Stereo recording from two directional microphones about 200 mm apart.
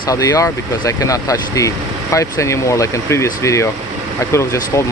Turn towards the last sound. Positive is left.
turn(degrees=15)  # may be behind; listen again after turning